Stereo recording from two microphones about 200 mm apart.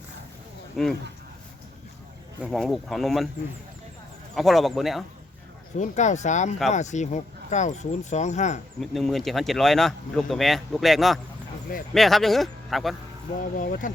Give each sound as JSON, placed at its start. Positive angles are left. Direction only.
{"t": 0.8, "sound": "speech", "side_deg": 0}
{"t": 2.4, "sound": "speech", "side_deg": 0}
{"t": 4.4, "sound": "speech", "side_deg": 0}
{"t": 5.7, "sound": "speech", "side_deg": 35}
{"t": 8.8, "sound": "speech", "side_deg": 0}
{"t": 13.4, "sound": "speech", "side_deg": 40}